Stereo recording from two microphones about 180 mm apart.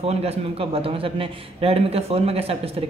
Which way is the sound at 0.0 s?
35° right (ahead or behind).